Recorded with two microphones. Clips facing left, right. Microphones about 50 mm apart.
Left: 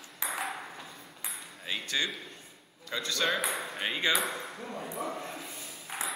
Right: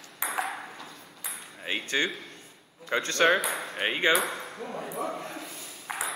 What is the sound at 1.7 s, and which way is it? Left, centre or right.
A man's voice, right.